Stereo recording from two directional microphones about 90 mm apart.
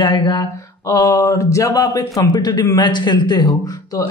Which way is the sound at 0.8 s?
35° left (ahead or behind).